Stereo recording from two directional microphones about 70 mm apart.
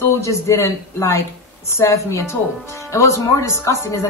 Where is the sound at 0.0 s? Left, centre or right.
Left.